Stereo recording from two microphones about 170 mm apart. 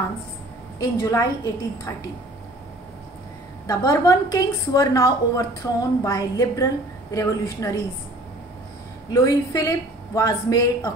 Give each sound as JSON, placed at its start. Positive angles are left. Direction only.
{"t": 0.7, "sound": "a woman's voice", "side_deg": 20}
{"t": 3.6, "sound": "a woman's voice", "side_deg": 20}
{"t": 9.1, "sound": "a woman's voice", "side_deg": 20}